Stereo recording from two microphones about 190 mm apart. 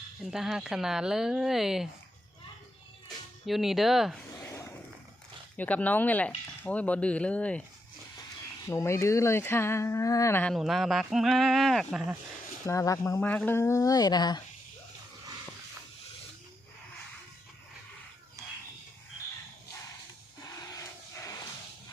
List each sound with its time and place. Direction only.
0.3 s speech: centre (ahead or behind)
3.1 s speech: centre (ahead or behind)
4.4 s a sound: 15° left (ahead or behind)
5.5 s speech: 10° left (ahead or behind)
8.6 s speech: 15° left (ahead or behind)
10.5 s speech: centre (ahead or behind)
12.6 s speech: 15° left (ahead or behind)
18.4 s a sound: 15° right (ahead or behind)